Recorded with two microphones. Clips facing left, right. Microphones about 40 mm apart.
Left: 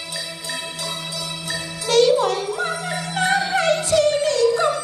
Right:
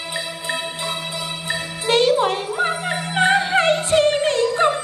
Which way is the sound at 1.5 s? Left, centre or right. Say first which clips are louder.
Right 1 dB; right.